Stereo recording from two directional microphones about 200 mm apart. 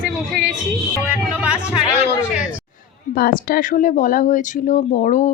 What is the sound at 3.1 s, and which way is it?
A woman's voice, 45° left (ahead or behind).